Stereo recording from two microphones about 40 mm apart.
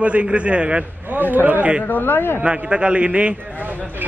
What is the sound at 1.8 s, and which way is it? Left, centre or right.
Speech, left.